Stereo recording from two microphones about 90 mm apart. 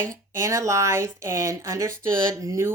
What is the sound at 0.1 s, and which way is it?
Speech, 35° right (ahead or behind).